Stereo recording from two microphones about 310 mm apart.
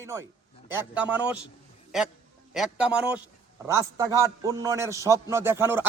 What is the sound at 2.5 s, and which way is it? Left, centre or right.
A man's voice, centre.